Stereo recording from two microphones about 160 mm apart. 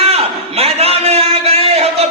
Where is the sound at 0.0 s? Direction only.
40° right (ahead or behind).